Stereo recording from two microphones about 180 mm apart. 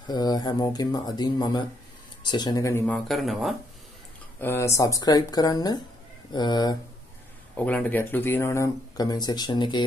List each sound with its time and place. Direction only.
0.0 s speech: 25° left (ahead or behind)
3.1 s speech: centre (ahead or behind)
4.4 s speech: 15° left (ahead or behind)
7.5 s speech: 10° left (ahead or behind); by 9.8 s 25° left (ahead or behind)